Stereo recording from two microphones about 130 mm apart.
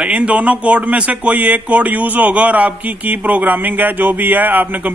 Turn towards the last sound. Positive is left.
turn(degrees=-15)  # may be behind; listen again after turning